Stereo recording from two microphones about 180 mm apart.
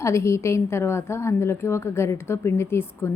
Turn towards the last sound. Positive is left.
turn(degrees=15)  # may be behind; listen again after turning